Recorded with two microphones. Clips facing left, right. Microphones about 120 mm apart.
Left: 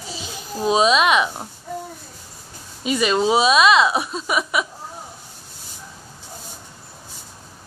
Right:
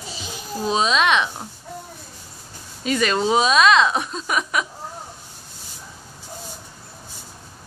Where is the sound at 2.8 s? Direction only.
10° left (ahead or behind).